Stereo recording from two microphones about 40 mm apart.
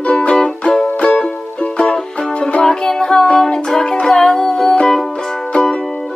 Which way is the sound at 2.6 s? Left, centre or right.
Centre.